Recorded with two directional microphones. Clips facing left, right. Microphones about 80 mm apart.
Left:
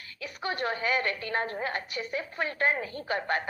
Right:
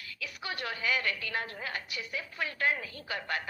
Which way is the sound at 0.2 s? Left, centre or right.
Left.